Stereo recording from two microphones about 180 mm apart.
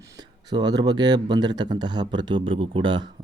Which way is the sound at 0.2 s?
20° right (ahead or behind).